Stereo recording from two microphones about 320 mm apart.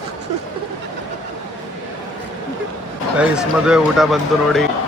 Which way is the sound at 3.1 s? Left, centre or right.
Centre.